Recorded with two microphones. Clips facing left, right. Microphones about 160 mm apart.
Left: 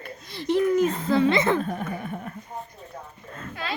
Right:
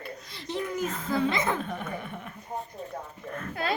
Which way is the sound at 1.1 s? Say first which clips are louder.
Left 5 dB; 70° left (ahead or behind).